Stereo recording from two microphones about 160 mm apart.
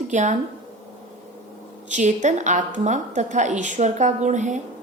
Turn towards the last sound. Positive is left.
turn(degrees=-50)  # may be behind; listen again after turning